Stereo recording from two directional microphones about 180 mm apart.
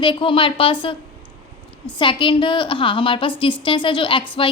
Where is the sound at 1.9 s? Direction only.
30° left (ahead or behind).